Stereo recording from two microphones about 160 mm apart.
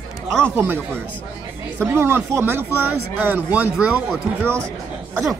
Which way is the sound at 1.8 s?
15° right (ahead or behind).